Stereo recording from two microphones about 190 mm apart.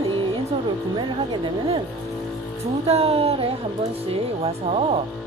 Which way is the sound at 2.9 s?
30° right (ahead or behind).